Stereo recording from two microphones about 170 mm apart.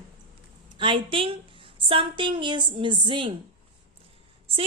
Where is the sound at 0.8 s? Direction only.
30° right (ahead or behind).